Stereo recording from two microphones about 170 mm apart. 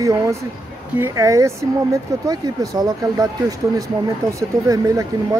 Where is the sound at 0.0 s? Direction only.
20° right (ahead or behind).